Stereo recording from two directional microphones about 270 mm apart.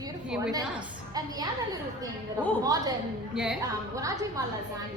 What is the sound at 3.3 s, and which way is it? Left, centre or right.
A woman's voice, centre.